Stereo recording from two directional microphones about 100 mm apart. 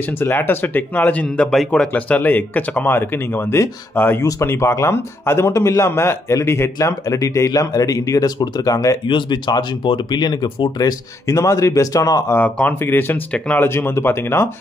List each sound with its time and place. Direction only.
0.0 s speech: 20° left (ahead or behind); by 8.9 s 40° left (ahead or behind)
9.0 s speech: 50° left (ahead or behind); by 12.4 s 35° left (ahead or behind)
12.4 s speech: 15° left (ahead or behind)
13.7 s speech: 25° left (ahead or behind)